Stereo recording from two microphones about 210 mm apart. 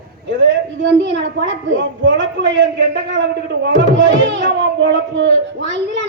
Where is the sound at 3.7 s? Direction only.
60° right (ahead or behind).